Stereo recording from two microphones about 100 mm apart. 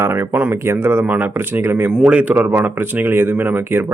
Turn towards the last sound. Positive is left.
turn(degrees=-20)  # may be behind; listen again after turning